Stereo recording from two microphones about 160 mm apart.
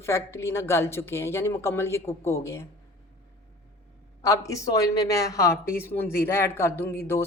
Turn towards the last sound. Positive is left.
turn(degrees=15)  # may be behind; listen again after turning